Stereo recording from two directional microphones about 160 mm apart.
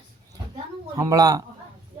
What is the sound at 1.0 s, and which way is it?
Speech, 20° right (ahead or behind).